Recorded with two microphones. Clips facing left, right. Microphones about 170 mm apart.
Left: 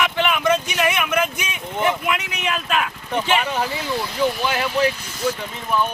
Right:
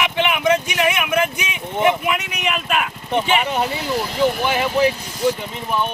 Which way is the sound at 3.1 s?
20° right (ahead or behind).